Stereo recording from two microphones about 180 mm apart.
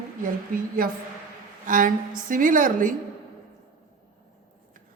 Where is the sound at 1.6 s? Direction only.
50° right (ahead or behind).